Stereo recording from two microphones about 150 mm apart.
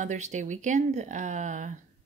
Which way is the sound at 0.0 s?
55° right (ahead or behind).